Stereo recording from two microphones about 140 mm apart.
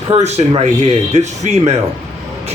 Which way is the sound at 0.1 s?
50° right (ahead or behind).